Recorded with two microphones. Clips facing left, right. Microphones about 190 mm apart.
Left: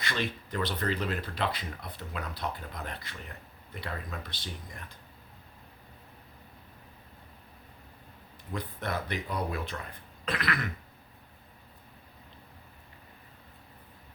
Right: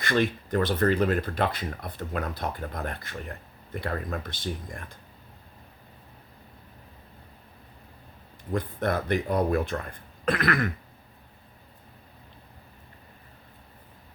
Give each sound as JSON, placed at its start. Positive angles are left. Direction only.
{"t": 0.0, "sound": "speech", "side_deg": -50}
{"t": 8.5, "sound": "speech", "side_deg": -50}